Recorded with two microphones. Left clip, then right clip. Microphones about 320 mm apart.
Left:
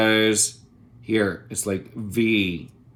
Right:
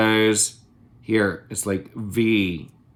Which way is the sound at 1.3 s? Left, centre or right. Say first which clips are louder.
Right 1 dB; right.